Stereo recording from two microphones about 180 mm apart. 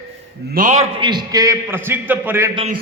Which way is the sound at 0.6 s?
45° right (ahead or behind).